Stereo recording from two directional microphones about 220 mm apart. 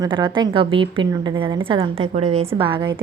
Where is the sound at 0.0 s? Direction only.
20° right (ahead or behind).